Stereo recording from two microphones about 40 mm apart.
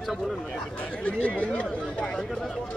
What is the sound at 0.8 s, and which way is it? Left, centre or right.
Speech, left.